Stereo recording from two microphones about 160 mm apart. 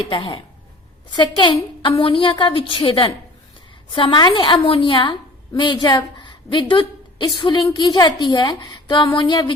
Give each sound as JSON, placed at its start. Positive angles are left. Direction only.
{"t": 0.1, "sound": "a woman's voice", "side_deg": 35}